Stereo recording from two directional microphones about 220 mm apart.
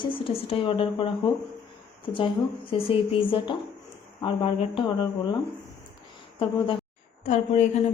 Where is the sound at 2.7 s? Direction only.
20° left (ahead or behind).